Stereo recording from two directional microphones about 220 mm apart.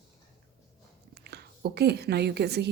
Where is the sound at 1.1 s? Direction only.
45° right (ahead or behind).